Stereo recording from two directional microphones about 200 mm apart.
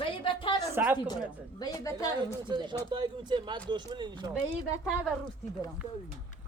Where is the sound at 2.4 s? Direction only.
25° right (ahead or behind).